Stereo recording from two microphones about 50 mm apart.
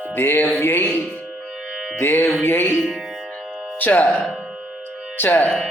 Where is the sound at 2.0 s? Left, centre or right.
Left.